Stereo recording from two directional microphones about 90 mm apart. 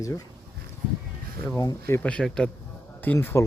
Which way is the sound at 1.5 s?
35° left (ahead or behind).